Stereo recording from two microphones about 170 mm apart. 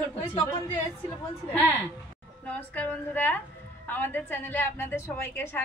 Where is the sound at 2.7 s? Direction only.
10° left (ahead or behind).